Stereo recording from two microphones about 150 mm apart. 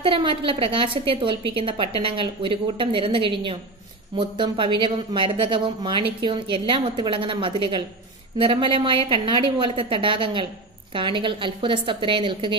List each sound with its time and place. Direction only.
0.0 s speech: 35° right (ahead or behind)